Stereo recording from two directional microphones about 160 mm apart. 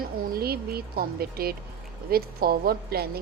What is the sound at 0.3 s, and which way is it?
A woman's voice, 70° right (ahead or behind).